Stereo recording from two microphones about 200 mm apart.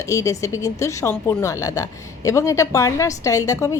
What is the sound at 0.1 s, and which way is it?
Speech, 15° left (ahead or behind).